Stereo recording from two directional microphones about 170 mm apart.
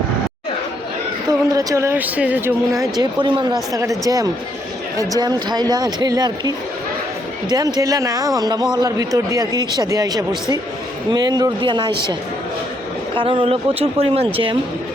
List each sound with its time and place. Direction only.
1.3 s a man's voice: 20° right (ahead or behind)
7.5 s a man's voice: 20° right (ahead or behind)
13.1 s a man's voice: 30° right (ahead or behind)